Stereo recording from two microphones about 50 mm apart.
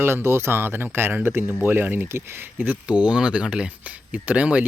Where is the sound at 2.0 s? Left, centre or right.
Right.